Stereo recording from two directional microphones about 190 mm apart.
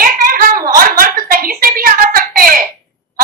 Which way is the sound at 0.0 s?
45° right (ahead or behind).